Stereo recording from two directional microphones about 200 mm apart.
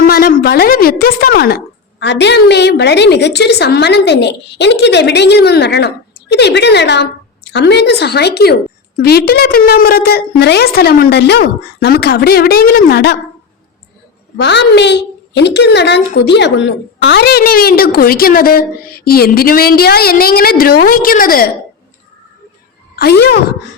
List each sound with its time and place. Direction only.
0.1 s a woman's voice: 45° left (ahead or behind)
14.4 s a woman's voice: 60° left (ahead or behind)
23.0 s a woman's voice: 55° left (ahead or behind)